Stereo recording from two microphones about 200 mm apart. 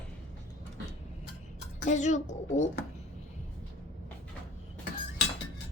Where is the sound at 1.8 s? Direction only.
35° left (ahead or behind).